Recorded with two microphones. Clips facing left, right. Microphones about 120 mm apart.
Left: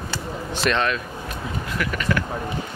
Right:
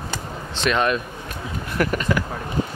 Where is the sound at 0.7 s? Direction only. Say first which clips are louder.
Right 2 dB; 10° right (ahead or behind).